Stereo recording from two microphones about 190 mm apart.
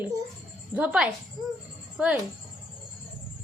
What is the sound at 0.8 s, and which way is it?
A child's voice, 5° right (ahead or behind).